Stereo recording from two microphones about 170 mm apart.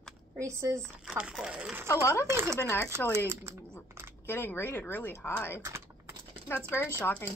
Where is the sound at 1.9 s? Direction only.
15° left (ahead or behind).